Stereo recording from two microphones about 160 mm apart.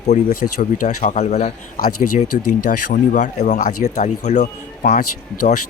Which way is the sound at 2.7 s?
55° left (ahead or behind).